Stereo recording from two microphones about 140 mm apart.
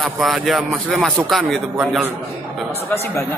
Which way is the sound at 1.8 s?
10° right (ahead or behind).